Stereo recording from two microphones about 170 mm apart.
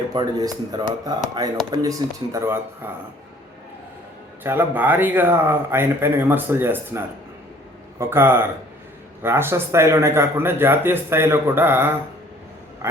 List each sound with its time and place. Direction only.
0.1 s speech: 25° right (ahead or behind)
4.4 s speech: 10° right (ahead or behind)